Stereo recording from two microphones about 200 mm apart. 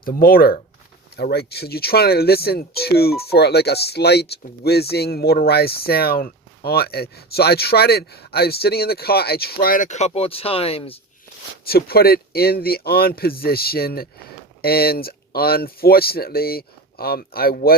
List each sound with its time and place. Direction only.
0.0 s speech: 50° left (ahead or behind); by 10.9 s 30° left (ahead or behind)
11.6 s speech: 50° left (ahead or behind)